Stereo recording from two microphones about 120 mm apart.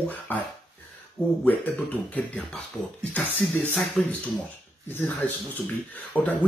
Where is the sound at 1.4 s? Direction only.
15° left (ahead or behind).